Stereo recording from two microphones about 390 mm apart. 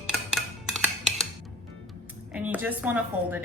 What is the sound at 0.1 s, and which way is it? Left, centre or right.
Music, centre.